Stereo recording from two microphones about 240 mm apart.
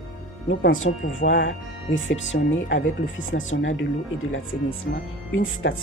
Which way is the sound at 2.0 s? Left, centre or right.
Left.